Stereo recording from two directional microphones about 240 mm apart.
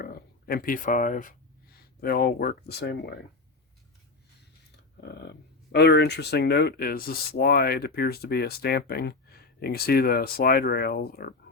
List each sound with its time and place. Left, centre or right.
0.0 s speech: left
4.9 s speech: left